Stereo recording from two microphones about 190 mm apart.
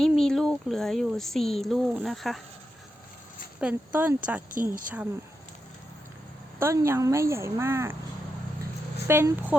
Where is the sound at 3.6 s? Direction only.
10° right (ahead or behind).